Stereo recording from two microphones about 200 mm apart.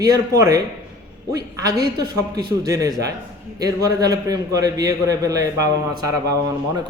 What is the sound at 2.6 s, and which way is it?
A man's voice, 15° right (ahead or behind).